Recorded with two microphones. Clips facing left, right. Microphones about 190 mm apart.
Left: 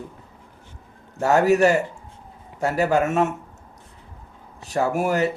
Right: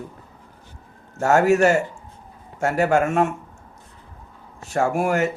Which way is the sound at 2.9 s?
20° left (ahead or behind).